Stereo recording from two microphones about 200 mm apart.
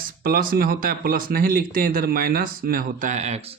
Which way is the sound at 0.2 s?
45° right (ahead or behind).